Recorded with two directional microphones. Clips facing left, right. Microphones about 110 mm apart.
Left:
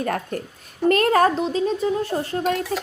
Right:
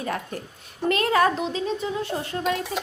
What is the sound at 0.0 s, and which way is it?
A woman's voice, 50° left (ahead or behind).